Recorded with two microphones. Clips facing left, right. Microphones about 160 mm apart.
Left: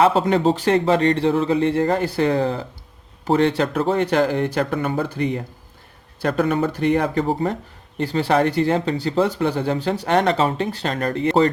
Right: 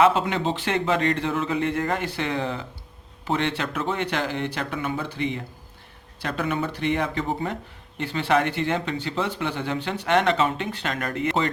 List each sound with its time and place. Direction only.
0.0 s speech: 35° left (ahead or behind)